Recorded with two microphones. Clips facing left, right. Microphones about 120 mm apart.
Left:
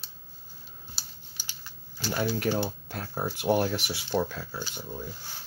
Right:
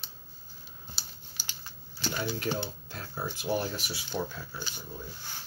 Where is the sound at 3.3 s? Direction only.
60° left (ahead or behind); by 4.4 s 80° left.